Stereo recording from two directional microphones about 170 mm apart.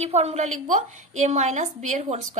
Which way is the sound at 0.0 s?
40° right (ahead or behind).